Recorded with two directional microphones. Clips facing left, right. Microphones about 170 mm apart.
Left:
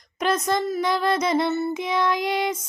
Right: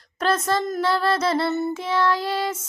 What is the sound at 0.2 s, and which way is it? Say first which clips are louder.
Child singing: even; 15° left (ahead or behind).